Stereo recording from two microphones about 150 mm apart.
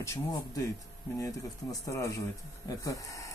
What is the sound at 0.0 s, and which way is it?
Speech, 20° left (ahead or behind).